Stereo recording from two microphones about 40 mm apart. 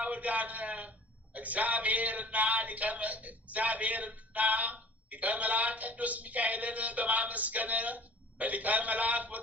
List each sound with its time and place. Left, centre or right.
0.0 s speech: right